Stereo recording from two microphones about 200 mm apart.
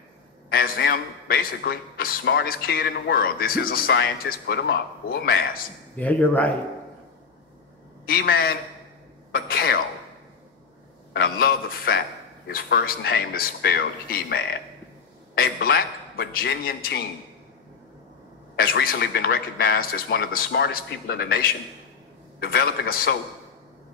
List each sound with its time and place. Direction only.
0.5 s a man's voice: 50° left (ahead or behind)
5.9 s speech: 5° left (ahead or behind)
8.0 s a man's voice: 50° left (ahead or behind)
11.1 s a man's voice: 50° left (ahead or behind)
18.6 s a man's voice: 50° left (ahead or behind)